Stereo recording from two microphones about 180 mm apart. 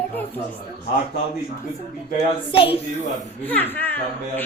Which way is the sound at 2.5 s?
30° left (ahead or behind).